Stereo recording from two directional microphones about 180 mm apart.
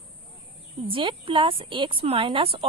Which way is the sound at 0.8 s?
30° right (ahead or behind).